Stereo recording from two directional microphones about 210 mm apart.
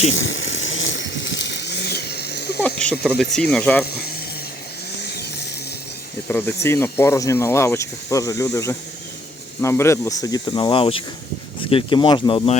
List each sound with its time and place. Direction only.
0.1 s a sound: 60° left (ahead or behind)
2.6 s speech: 5° left (ahead or behind)
6.2 s speech: 10° left (ahead or behind)